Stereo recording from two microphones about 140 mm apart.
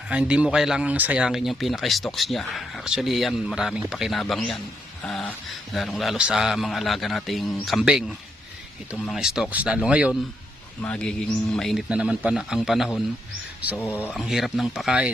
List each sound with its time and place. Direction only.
0.1 s speech: 5° right (ahead or behind)
10.8 s a man's voice: 10° left (ahead or behind)
13.7 s a man's voice: 15° left (ahead or behind)
14.1 s speech: centre (ahead or behind)